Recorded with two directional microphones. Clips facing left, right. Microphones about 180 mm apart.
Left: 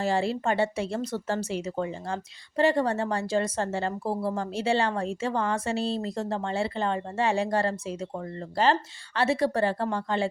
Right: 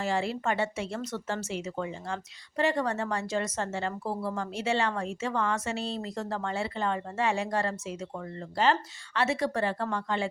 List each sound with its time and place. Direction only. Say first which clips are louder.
0.0 s speech: left 3 dB; 35° left (ahead or behind)